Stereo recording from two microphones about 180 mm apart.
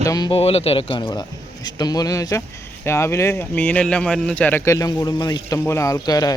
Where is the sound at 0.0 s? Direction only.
20° left (ahead or behind).